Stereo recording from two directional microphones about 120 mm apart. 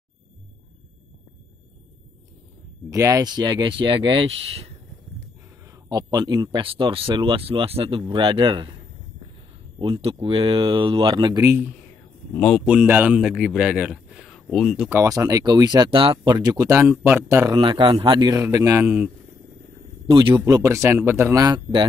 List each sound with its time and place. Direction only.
2.9 s speech: 25° right (ahead or behind); by 4.6 s 55° right (ahead or behind)
5.7 s speech: 30° right (ahead or behind)
6.6 s speech: 45° right (ahead or behind)
12.3 s speech: 10° left (ahead or behind)
12.6 s speech: 15° right (ahead or behind)
14.9 s speech: 25° right (ahead or behind)
17.6 s speech: 45° right (ahead or behind)
18.3 s speech: 25° right (ahead or behind)
20.4 s speech: 25° right (ahead or behind)